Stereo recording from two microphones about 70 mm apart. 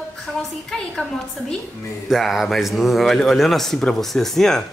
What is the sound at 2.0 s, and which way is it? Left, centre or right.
Speech, centre.